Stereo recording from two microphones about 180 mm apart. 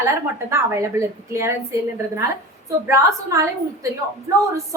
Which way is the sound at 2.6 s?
15° right (ahead or behind).